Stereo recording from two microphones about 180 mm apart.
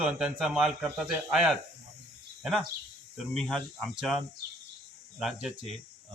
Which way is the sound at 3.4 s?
Centre (ahead or behind).